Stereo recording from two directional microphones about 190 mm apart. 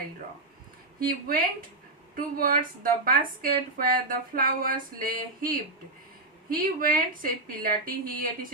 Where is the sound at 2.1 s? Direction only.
50° right (ahead or behind).